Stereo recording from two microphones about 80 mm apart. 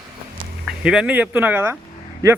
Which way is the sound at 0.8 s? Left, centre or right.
Centre.